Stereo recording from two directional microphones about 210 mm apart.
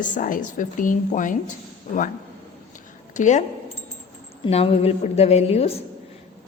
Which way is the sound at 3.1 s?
35° left (ahead or behind).